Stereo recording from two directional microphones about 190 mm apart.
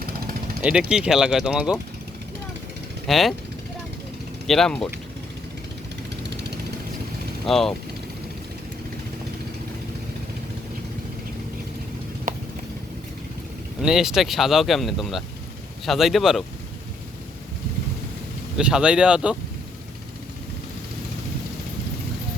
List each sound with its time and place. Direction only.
0.6 s speech: 5° right (ahead or behind)
3.1 s speech: centre (ahead or behind)
4.4 s speech: centre (ahead or behind)
7.4 s speech: centre (ahead or behind)
12.3 s clip-clop: 45° right (ahead or behind)
13.8 s speech: 5° right (ahead or behind)
18.5 s speech: 5° right (ahead or behind)